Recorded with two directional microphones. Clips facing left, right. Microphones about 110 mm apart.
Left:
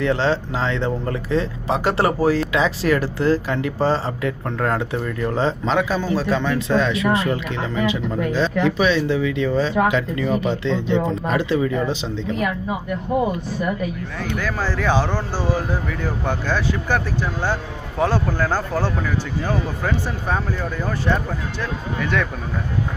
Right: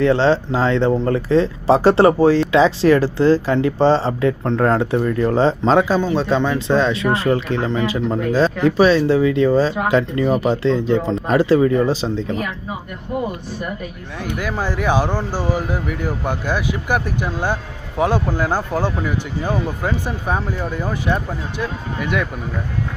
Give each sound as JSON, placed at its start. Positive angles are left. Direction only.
{"t": 0.0, "sound": "speech", "side_deg": -30}
{"t": 14.3, "sound": "speech", "side_deg": -15}